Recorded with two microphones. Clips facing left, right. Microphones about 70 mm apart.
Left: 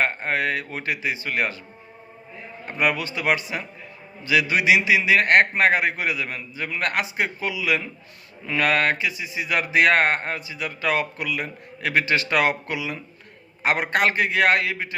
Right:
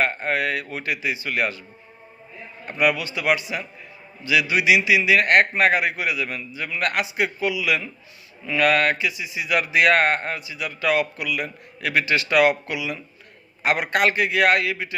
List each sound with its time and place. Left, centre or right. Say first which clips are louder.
0.0 s a man's voice: right 1 dB; left
2.7 s a man's voice: right 2 dB; left